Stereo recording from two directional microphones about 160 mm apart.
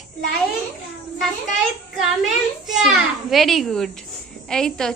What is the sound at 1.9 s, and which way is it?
A child's voice, centre (ahead or behind).